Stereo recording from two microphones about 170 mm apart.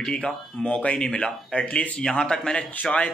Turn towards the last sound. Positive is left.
turn(degrees=5)  # may be behind; listen again after turning